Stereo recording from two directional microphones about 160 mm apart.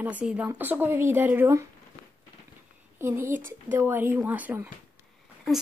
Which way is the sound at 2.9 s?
15° right (ahead or behind).